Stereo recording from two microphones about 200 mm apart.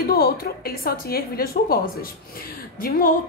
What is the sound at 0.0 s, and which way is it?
A woman's voice, 50° left (ahead or behind).